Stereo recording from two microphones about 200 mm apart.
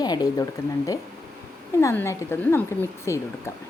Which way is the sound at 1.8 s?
15° left (ahead or behind).